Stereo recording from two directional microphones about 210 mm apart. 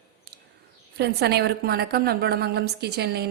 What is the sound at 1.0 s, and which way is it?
A woman's voice, 50° right (ahead or behind).